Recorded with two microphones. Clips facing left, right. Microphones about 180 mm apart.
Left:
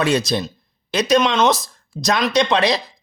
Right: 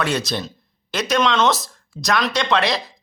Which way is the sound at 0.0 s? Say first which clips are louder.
Left 4 dB; 15° left (ahead or behind).